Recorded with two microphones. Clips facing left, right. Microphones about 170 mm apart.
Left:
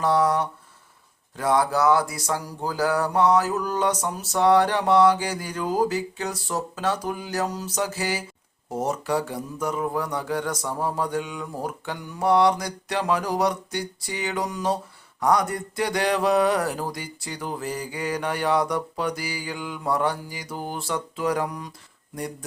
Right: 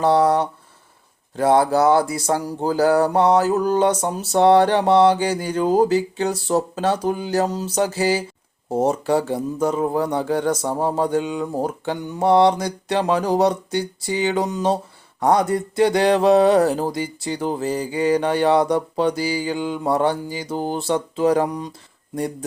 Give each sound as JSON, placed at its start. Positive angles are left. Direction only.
{"t": 0.0, "sound": "speech", "side_deg": -30}